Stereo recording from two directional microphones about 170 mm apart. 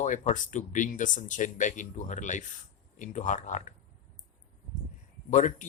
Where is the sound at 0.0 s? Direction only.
45° left (ahead or behind).